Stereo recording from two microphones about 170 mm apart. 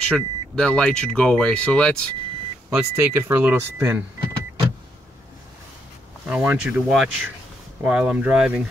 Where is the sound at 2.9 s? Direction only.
15° right (ahead or behind).